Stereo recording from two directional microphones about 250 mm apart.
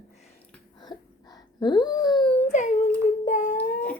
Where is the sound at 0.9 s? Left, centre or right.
Centre.